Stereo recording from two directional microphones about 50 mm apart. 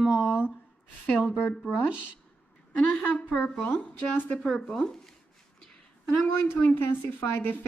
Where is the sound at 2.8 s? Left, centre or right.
Left.